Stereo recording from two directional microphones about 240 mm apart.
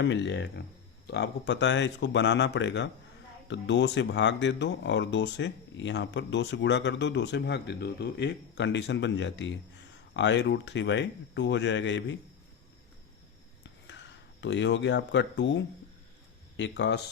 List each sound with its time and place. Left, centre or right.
0.0 s speech: left
14.4 s speech: left